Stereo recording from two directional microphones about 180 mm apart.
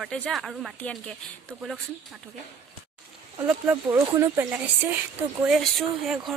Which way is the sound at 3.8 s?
20° right (ahead or behind).